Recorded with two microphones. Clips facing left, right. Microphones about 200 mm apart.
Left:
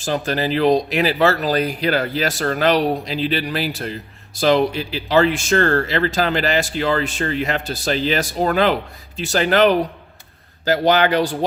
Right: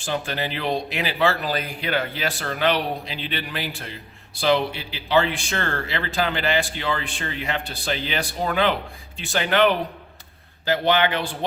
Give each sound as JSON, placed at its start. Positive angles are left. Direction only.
{"t": 0.0, "sound": "speech", "side_deg": 40}